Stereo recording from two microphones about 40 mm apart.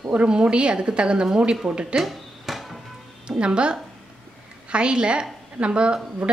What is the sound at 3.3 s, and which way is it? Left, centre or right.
Speech, right.